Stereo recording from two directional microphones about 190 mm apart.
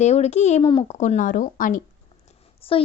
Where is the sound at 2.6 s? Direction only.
30° left (ahead or behind).